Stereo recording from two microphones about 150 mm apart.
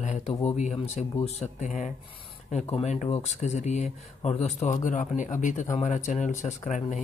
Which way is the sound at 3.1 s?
50° left (ahead or behind).